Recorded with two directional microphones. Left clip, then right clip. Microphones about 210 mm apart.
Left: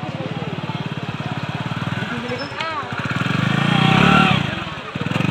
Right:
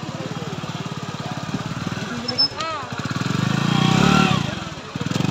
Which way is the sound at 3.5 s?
35° right (ahead or behind).